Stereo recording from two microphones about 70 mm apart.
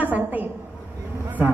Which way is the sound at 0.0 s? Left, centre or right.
Right.